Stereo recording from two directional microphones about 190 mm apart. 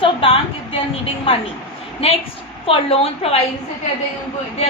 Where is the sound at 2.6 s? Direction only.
30° left (ahead or behind).